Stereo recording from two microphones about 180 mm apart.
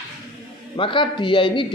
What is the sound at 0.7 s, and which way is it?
Speech, 30° left (ahead or behind).